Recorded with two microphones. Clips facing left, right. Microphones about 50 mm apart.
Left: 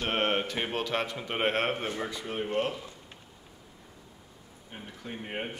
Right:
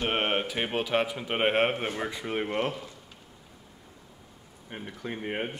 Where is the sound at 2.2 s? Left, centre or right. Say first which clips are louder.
Right 1 dB; right.